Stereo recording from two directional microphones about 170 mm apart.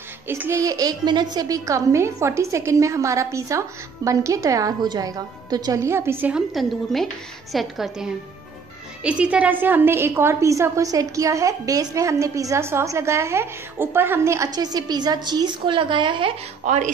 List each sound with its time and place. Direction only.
0.3 s a woman's voice: 15° right (ahead or behind)
16.6 s speech: 45° right (ahead or behind)